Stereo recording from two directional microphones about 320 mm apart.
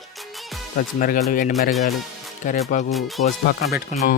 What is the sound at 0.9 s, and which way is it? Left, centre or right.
Speech, left.